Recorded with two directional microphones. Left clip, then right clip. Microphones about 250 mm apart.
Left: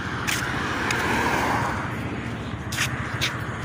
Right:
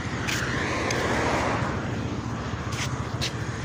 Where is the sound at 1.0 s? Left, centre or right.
Left.